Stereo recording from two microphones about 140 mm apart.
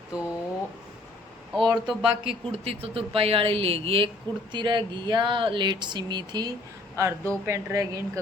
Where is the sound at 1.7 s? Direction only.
5° right (ahead or behind).